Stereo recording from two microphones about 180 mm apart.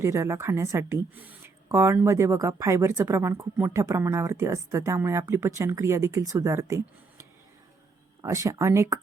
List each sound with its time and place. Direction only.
0.0 s a woman's voice: 15° right (ahead or behind)